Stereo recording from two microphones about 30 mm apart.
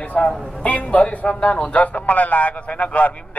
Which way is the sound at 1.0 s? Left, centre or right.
Left.